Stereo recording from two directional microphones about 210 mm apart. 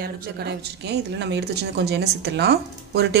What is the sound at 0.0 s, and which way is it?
Speech, 50° right (ahead or behind).